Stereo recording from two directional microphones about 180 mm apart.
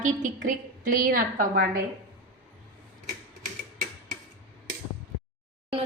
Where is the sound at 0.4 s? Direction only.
50° right (ahead or behind).